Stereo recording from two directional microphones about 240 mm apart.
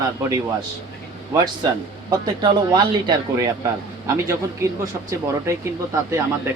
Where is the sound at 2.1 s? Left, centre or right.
Centre.